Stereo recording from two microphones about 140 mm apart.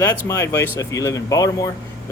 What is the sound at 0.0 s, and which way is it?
Speech, 20° left (ahead or behind).